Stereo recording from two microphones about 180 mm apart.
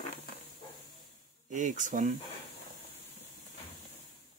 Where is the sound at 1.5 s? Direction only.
45° right (ahead or behind).